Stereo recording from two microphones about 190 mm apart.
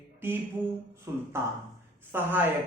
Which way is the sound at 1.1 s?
15° right (ahead or behind).